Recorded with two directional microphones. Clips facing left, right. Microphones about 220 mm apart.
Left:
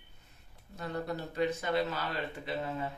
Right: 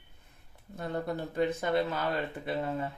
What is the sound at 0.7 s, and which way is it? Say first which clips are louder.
Speech: right 3 dB; 50° right (ahead or behind).